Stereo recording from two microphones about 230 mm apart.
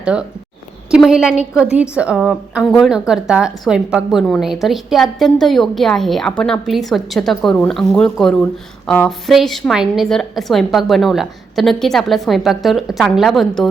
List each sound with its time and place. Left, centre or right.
0.0 s a woman's voice: centre